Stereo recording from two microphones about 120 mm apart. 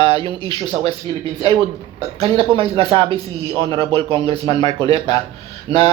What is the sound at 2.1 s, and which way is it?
Speech, 50° right (ahead or behind).